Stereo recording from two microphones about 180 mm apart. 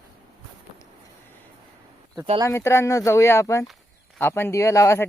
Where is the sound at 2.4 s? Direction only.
15° left (ahead or behind).